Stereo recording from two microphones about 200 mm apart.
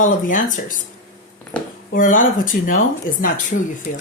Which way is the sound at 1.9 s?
40° left (ahead or behind).